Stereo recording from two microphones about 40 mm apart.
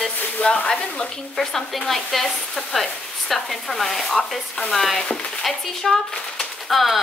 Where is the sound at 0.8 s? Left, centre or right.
Left.